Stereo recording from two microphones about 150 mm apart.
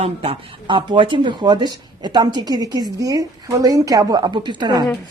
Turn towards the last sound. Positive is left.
turn(degrees=-30)  # may be behind; listen again after turning